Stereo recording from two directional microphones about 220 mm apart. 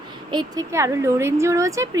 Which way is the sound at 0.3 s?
20° right (ahead or behind).